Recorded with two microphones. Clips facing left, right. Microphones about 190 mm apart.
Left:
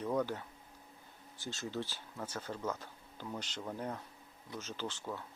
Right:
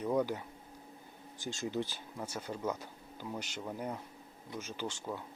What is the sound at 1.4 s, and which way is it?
Speech, 15° right (ahead or behind).